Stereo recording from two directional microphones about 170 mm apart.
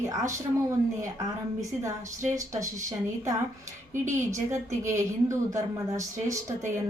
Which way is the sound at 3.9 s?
45° right (ahead or behind).